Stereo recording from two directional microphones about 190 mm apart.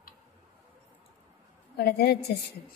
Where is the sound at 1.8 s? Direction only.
60° left (ahead or behind).